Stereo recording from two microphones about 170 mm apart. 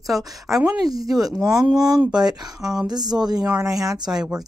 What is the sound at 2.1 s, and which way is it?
Speech, 25° right (ahead or behind).